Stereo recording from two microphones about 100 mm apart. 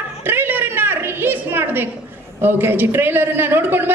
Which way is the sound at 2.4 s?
20° right (ahead or behind).